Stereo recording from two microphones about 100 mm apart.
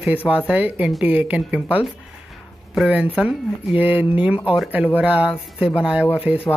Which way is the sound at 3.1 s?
10° right (ahead or behind).